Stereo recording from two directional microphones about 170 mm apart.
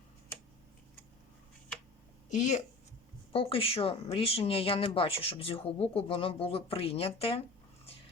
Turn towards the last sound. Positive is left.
turn(degrees=35)  # may be behind; listen again after turning